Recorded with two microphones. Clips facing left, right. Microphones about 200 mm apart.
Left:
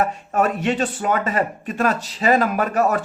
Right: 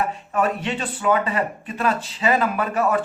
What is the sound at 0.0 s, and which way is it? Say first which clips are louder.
A man's voice: left 2 dB; 45° left (ahead or behind).